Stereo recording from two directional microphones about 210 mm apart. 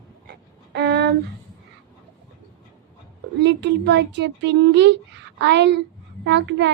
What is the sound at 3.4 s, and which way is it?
Speech, 55° right (ahead or behind).